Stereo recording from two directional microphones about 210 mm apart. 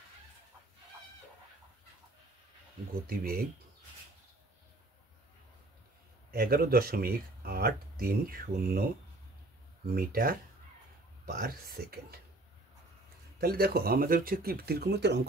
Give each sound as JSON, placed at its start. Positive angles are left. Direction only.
{"t": 2.9, "sound": "speech", "side_deg": -45}
{"t": 6.3, "sound": "speech", "side_deg": -45}
{"t": 9.9, "sound": "speech", "side_deg": -45}
{"t": 13.4, "sound": "speech", "side_deg": -45}